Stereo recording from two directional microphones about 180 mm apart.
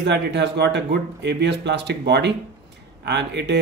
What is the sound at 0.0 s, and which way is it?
Speech, 70° right (ahead or behind).